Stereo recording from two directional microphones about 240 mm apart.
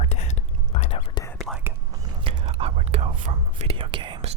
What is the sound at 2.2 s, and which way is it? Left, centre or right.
Whispering, right.